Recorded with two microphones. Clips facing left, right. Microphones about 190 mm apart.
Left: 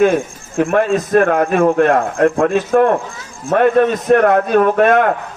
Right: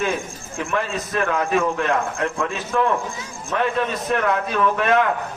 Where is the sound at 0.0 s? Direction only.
55° left (ahead or behind).